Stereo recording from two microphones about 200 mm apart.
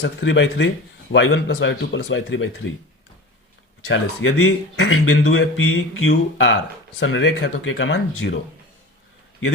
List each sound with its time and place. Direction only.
0.0 s speech: 65° left (ahead or behind)
3.8 s speech: 70° left (ahead or behind)